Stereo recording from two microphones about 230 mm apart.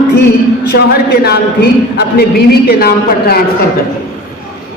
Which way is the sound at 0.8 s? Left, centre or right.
Left.